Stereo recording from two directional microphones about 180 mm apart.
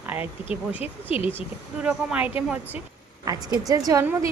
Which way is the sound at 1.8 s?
5° right (ahead or behind).